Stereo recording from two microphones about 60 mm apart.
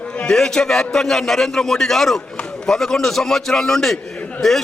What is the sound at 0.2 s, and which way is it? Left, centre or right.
A man's voice, centre.